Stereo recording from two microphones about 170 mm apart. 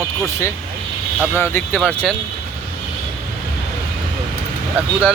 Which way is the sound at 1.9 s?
5° left (ahead or behind).